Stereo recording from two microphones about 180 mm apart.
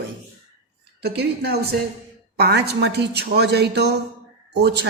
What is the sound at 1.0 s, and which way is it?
A woman's voice, 65° right (ahead or behind).